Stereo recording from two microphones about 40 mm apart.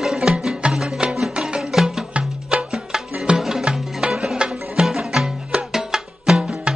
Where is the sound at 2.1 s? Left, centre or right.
Right.